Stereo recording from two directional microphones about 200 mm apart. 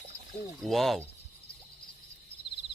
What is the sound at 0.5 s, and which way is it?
Speech, centre (ahead or behind).